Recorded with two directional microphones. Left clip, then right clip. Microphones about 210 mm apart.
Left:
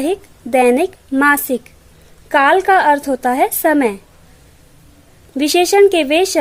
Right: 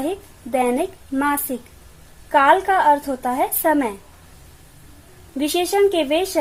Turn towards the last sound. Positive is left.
turn(degrees=45)  # may be behind; listen again after turning